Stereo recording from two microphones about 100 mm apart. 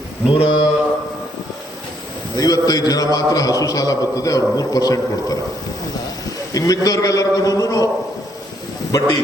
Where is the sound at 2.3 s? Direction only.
40° left (ahead or behind).